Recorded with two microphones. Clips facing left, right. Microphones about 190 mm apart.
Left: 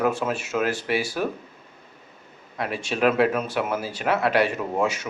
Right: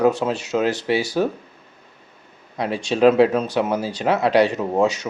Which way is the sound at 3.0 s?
30° right (ahead or behind).